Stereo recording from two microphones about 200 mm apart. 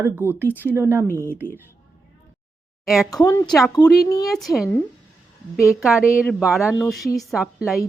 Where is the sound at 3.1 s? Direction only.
20° left (ahead or behind).